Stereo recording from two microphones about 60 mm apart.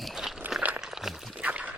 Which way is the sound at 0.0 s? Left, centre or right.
Centre.